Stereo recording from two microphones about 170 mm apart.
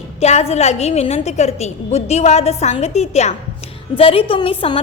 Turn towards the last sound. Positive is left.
turn(degrees=30)  # may be behind; listen again after turning